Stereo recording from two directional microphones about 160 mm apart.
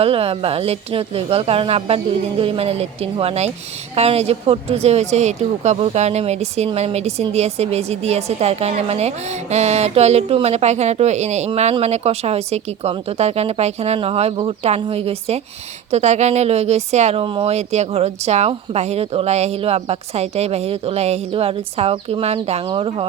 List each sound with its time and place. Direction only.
0.0 s speech: 35° right (ahead or behind)